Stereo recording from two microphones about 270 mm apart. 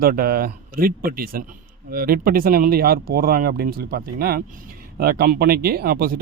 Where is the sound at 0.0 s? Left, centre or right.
Right.